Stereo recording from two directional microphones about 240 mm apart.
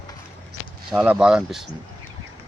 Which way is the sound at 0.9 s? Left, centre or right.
Centre.